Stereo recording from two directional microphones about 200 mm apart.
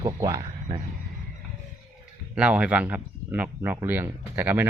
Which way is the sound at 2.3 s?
5° right (ahead or behind).